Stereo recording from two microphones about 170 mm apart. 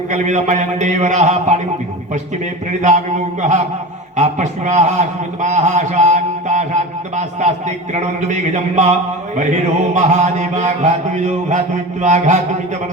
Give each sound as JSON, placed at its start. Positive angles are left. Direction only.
{"t": 0.1, "sound": "a man's voice", "side_deg": -45}
{"t": 2.8, "sound": "a man's voice", "side_deg": -45}
{"t": 4.2, "sound": "a man's voice", "side_deg": -45}